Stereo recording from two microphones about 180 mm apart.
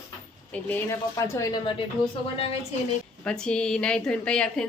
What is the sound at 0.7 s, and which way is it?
Speech, 15° left (ahead or behind).